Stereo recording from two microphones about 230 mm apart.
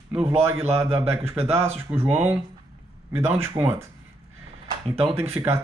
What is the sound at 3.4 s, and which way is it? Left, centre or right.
Speech, centre.